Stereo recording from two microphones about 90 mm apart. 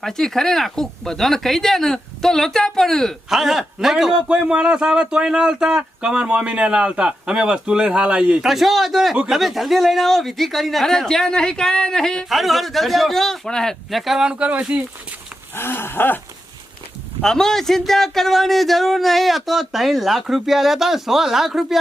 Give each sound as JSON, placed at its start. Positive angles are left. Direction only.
{"t": 0.0, "sound": "speech", "side_deg": 5}
{"t": 15.5, "sound": "a sound", "side_deg": 25}
{"t": 17.2, "sound": "speech", "side_deg": 5}